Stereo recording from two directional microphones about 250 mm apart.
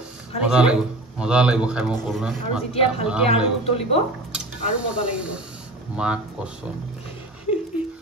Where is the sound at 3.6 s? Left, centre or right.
Left.